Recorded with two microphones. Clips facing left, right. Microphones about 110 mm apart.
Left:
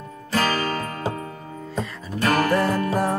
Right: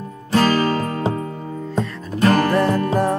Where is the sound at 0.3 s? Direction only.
30° right (ahead or behind).